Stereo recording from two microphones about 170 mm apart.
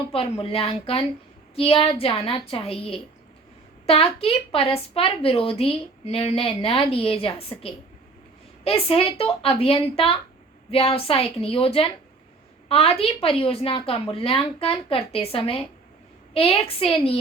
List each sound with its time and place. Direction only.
0.1 s a woman's voice: 35° left (ahead or behind)